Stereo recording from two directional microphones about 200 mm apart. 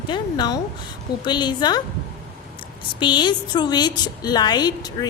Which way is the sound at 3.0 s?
25° left (ahead or behind).